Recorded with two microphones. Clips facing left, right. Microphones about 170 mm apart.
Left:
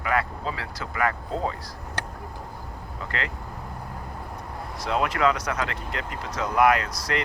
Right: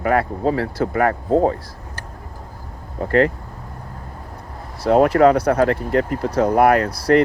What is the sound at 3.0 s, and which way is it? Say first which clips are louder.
Speech: right 17 dB; 50° right (ahead or behind).